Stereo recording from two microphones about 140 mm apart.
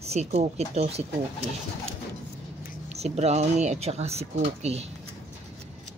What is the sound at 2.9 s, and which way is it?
Speech, 50° right (ahead or behind).